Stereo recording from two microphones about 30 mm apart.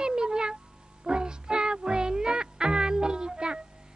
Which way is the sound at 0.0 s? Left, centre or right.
Right.